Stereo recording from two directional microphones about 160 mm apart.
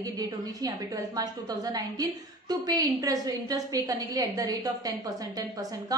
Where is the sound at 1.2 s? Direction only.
25° right (ahead or behind).